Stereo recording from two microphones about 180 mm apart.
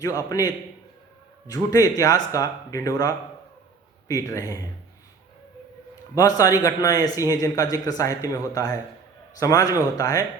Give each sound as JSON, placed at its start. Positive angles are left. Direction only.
{"t": 0.3, "sound": "speech", "side_deg": 20}
{"t": 6.1, "sound": "speech", "side_deg": 20}